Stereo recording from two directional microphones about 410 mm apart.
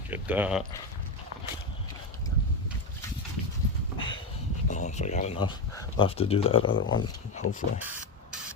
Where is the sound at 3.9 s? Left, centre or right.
Centre.